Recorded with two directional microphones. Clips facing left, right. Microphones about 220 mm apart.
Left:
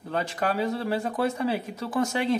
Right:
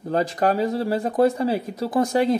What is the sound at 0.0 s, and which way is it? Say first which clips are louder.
Speech: right 7 dB; 35° right (ahead or behind).